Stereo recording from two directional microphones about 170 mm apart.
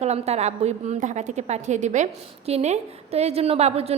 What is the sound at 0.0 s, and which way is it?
A woman's voice, 40° right (ahead or behind).